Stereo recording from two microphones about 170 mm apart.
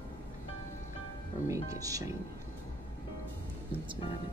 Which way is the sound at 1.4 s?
20° right (ahead or behind).